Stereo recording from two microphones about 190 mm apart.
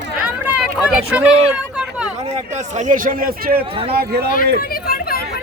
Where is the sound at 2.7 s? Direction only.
40° right (ahead or behind).